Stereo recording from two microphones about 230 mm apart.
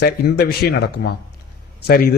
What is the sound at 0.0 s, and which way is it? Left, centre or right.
A man's voice, left.